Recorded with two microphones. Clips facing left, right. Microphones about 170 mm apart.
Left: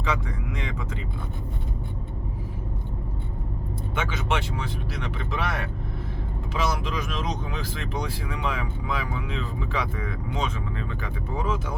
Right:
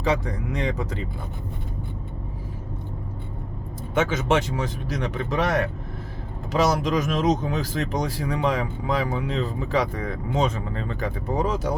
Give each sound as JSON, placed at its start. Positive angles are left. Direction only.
{"t": 0.0, "sound": "speech", "side_deg": -35}
{"t": 3.9, "sound": "speech", "side_deg": -40}